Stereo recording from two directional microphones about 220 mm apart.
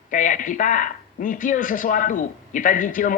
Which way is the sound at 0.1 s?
35° left (ahead or behind).